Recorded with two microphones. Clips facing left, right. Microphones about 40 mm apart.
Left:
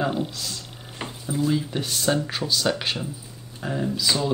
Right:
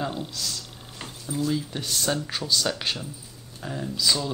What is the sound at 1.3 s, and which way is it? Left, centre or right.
Speech, centre.